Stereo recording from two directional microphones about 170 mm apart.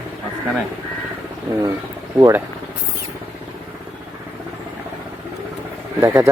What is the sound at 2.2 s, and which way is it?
Speech, 15° right (ahead or behind).